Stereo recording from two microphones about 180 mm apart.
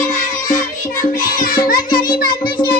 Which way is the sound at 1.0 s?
45° left (ahead or behind).